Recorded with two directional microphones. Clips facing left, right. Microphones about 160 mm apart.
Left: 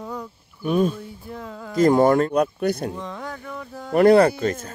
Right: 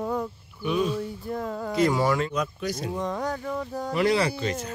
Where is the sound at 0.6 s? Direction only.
50° left (ahead or behind).